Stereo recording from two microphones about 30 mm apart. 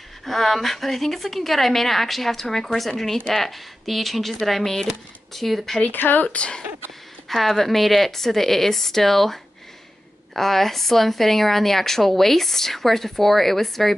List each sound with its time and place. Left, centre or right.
0.2 s a woman's voice: centre
5.9 s speech: left
6.2 s speech: left
7.2 s a woman's voice: centre